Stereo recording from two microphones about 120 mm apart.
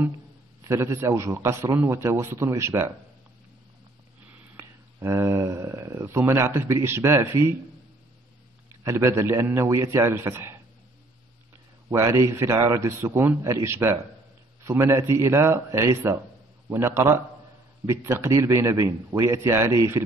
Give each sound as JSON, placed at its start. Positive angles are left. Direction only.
{"t": 0.7, "sound": "speech", "side_deg": -25}
{"t": 4.6, "sound": "speech", "side_deg": -25}
{"t": 8.8, "sound": "speech", "side_deg": -25}
{"t": 11.9, "sound": "speech", "side_deg": -25}